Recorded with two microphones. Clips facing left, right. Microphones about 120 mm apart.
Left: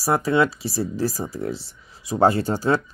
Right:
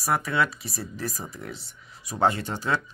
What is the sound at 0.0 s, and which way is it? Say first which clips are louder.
Speech: left 6 dB; 30° left (ahead or behind).